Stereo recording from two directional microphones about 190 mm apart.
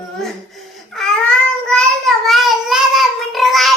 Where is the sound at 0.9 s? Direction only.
5° left (ahead or behind).